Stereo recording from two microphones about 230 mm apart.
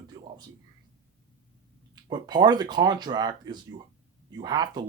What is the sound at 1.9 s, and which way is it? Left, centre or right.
Speech, centre.